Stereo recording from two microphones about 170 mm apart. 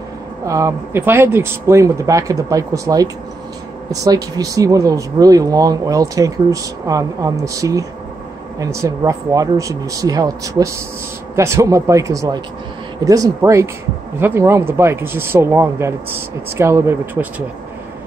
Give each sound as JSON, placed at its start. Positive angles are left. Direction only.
{"t": 0.5, "sound": "speech", "side_deg": -20}